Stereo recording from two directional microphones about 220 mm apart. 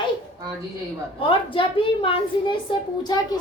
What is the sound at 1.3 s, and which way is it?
A woman's voice, 25° left (ahead or behind).